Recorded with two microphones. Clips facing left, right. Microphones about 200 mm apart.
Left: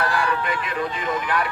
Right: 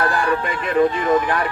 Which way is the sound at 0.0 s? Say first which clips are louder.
Right 4 dB; 50° right (ahead or behind).